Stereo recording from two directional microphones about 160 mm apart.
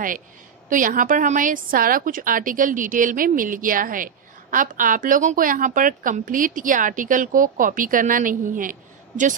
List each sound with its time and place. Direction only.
0.7 s a woman's voice: 55° right (ahead or behind)